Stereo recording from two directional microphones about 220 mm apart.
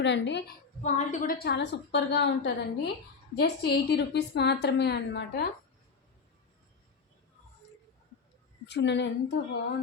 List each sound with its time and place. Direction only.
0.0 s a woman's voice: 55° left (ahead or behind)
0.8 s a woman's voice: 30° left (ahead or behind); by 5.5 s 50° left (ahead or behind)
8.6 s a woman's voice: 50° left (ahead or behind)